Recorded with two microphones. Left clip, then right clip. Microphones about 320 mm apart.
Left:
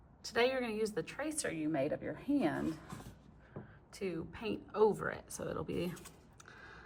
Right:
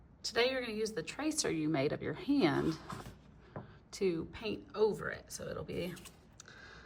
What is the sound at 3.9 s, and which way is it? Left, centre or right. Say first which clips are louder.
Speech: right 6 dB; centre.